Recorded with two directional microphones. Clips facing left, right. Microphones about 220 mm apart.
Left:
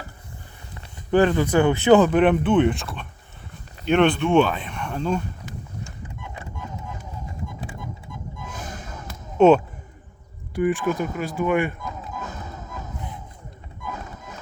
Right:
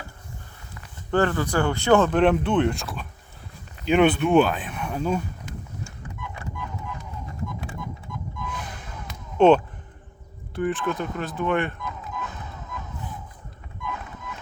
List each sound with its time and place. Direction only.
1.1 s speech: 15° left (ahead or behind)
2.0 s speech: 5° left (ahead or behind)
6.2 s a sound: 20° left (ahead or behind)
8.4 s a sound: 45° left (ahead or behind)
9.0 s basketball bounce: 5° left (ahead or behind)
10.5 s speech: 10° left (ahead or behind)
11.8 s music: 40° left (ahead or behind)
13.8 s boat: 40° left (ahead or behind)